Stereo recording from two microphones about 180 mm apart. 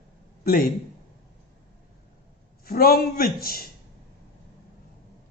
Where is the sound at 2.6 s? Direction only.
55° left (ahead or behind).